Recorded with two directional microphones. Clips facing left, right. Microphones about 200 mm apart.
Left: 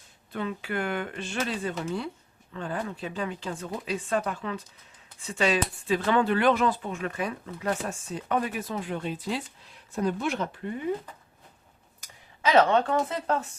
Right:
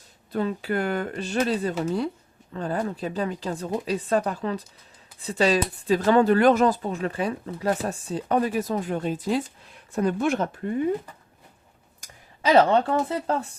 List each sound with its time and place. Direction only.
0.3 s speech: 40° right (ahead or behind)
9.9 s speech: 55° right (ahead or behind)
12.9 s speech: 30° right (ahead or behind)